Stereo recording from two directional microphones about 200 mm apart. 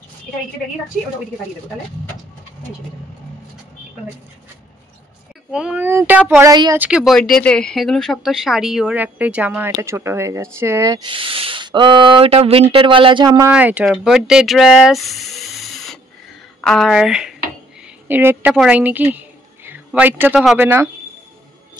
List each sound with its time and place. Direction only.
5.5 s speech: 5° right (ahead or behind)
6.8 s speech: 5° right (ahead or behind); by 13.5 s 20° right (ahead or behind)
13.5 s a woman's voice: 5° right (ahead or behind)